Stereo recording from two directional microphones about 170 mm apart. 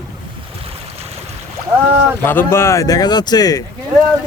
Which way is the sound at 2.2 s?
15° left (ahead or behind).